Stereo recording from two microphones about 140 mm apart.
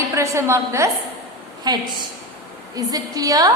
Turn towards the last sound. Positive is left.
turn(degrees=-25)  # may be behind; listen again after turning